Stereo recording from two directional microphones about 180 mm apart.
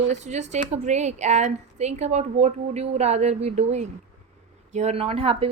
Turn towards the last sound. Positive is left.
turn(degrees=-30)  # may be behind; listen again after turning